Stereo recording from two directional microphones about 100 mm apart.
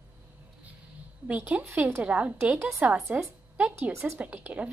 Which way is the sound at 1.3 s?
15° right (ahead or behind).